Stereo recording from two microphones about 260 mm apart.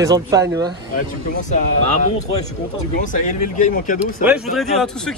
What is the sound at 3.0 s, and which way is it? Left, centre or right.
Speech, left.